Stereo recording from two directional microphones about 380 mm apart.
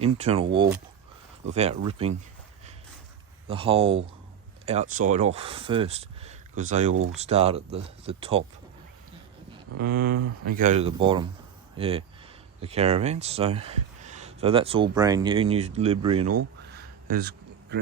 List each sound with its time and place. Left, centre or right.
0.0 s speech: centre
3.4 s speech: centre
9.7 s speech: right
16.6 s a sound: right